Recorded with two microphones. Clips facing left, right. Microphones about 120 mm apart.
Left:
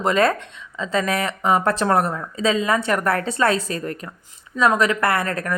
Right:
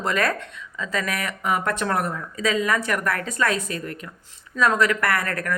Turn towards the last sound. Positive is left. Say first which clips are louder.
# left 3 dB
turn(degrees=25)  # may be behind; listen again after turning